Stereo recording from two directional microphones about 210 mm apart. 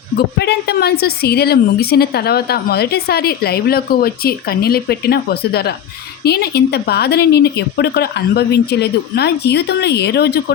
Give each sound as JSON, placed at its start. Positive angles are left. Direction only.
{"t": 0.3, "sound": "a woman's voice", "side_deg": 50}